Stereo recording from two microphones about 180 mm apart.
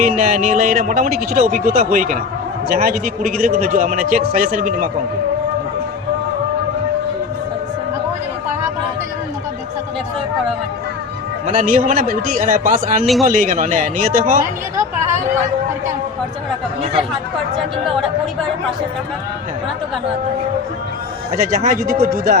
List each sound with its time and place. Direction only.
0.0 s a man's voice: 45° right (ahead or behind)
11.4 s a man's voice: 45° right (ahead or behind)
16.8 s speech: 30° right (ahead or behind)
17.8 s speech: centre (ahead or behind)
21.3 s a man's voice: 40° right (ahead or behind)